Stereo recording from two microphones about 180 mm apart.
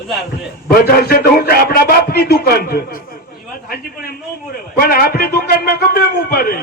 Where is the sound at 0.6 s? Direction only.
60° left (ahead or behind).